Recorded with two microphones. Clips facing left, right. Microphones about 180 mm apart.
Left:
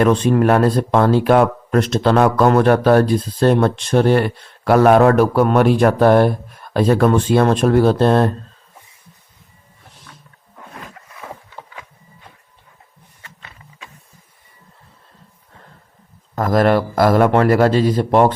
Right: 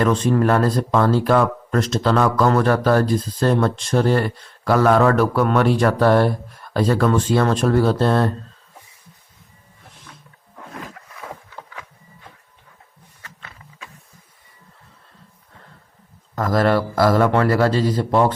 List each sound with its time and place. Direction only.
0.0 s a man's voice: 60° left (ahead or behind); by 5.6 s 40° left (ahead or behind)
6.0 s a man's voice: 50° left (ahead or behind)
8.0 s speech: 20° left (ahead or behind)
16.3 s a man's voice: 50° left (ahead or behind)
17.8 s speech: 60° left (ahead or behind)